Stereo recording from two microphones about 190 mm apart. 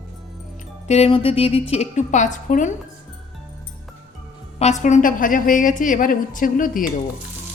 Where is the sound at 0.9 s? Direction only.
30° left (ahead or behind).